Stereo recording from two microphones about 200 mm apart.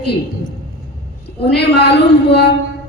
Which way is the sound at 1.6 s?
55° left (ahead or behind).